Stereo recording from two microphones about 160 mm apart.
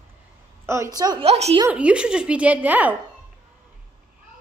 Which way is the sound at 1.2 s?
40° right (ahead or behind).